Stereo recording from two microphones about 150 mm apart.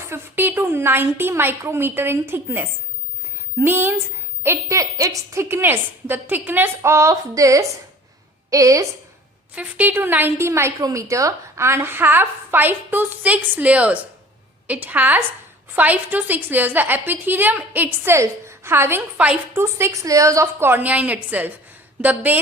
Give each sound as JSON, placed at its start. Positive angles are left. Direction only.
{"t": 0.1, "sound": "a woman's voice", "side_deg": -15}
{"t": 9.6, "sound": "a woman's voice", "side_deg": -10}